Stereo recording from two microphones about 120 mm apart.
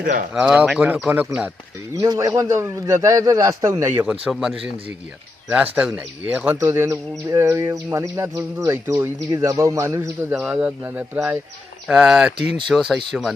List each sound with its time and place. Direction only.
0.3 s speech: 5° right (ahead or behind)
2.0 s speech: 30° right (ahead or behind)
4.0 s speech: 5° right (ahead or behind); by 10.4 s 25° right (ahead or behind)
10.4 s speech: 10° right (ahead or behind)
11.9 s speech: 5° right (ahead or behind)